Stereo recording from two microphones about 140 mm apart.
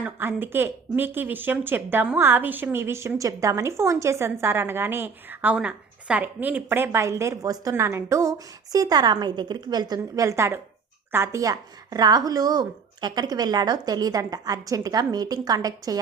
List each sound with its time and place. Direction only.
0.0 s a woman's voice: 15° right (ahead or behind)